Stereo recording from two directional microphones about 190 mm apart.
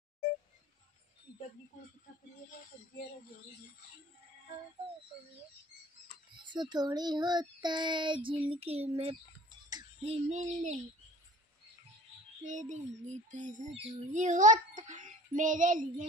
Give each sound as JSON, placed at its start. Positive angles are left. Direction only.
{"t": 6.4, "sound": "a child's voice", "side_deg": -25}
{"t": 12.4, "sound": "a sound", "side_deg": -40}
{"t": 13.7, "sound": "speech", "side_deg": -30}
{"t": 14.1, "sound": "a child's voice", "side_deg": -40}